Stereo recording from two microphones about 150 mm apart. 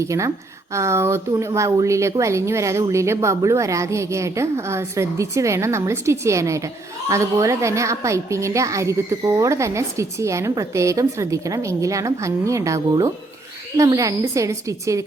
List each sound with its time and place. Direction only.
0.0 s a woman's voice: 20° right (ahead or behind)